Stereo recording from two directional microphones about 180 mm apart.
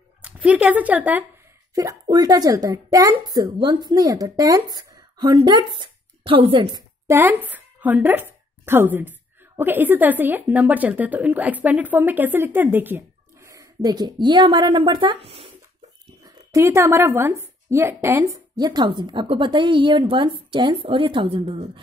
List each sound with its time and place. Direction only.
0.2 s a woman's voice: 5° right (ahead or behind)
1.8 s a woman's voice: 20° right (ahead or behind)
7.1 s a woman's voice: 10° right (ahead or behind); by 15.5 s 30° right (ahead or behind)
16.3 s a woman's voice: 15° right (ahead or behind)